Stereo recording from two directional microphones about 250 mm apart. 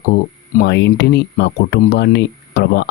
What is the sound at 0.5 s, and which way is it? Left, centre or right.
Speech, left.